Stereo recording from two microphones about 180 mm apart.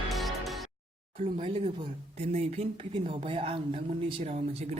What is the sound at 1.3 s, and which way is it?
Speech, 30° right (ahead or behind).